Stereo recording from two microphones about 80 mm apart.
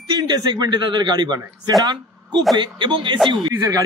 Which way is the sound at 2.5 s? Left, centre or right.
Right.